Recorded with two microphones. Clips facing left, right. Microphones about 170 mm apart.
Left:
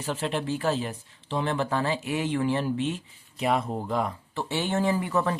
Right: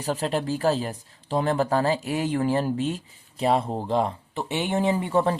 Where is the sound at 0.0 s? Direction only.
35° right (ahead or behind).